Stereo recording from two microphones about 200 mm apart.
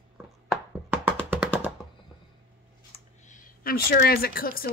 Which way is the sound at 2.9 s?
40° left (ahead or behind).